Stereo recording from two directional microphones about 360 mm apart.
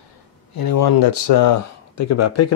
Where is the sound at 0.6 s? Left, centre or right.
Left.